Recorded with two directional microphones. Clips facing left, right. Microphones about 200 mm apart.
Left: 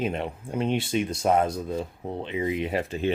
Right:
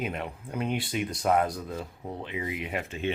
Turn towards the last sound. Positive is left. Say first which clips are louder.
# left 5 dB
turn(degrees=35)  # may be behind; listen again after turning